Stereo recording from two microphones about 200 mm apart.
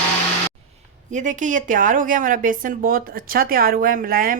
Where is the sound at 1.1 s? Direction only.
40° right (ahead or behind).